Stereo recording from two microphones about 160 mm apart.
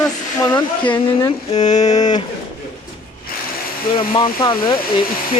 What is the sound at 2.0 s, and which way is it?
Speech, 25° left (ahead or behind).